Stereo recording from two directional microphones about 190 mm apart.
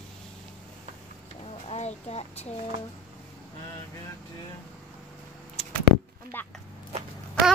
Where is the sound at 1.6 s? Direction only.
35° left (ahead or behind).